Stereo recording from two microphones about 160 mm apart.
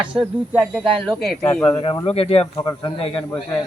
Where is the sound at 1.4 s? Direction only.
20° left (ahead or behind).